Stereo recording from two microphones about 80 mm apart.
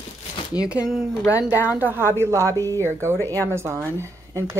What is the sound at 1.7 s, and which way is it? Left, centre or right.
Speech, right.